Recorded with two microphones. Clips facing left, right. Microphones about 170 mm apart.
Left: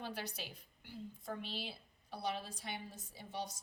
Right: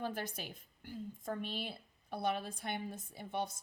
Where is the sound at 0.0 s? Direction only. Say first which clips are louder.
Right 4 dB; 50° right (ahead or behind).